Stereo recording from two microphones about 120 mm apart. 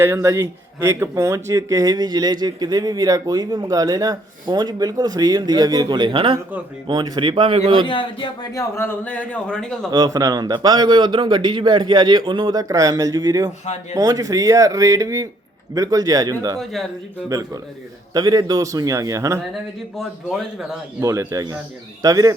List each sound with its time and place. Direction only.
0.0 s a man's voice: 25° right (ahead or behind); by 7.9 s 50° right (ahead or behind)
7.9 s speech: 40° left (ahead or behind)
8.5 s a man's voice: 20° left (ahead or behind)
9.9 s speech: 30° right (ahead or behind)
20.0 s a man's voice: centre (ahead or behind)
21.0 s speech: 25° right (ahead or behind)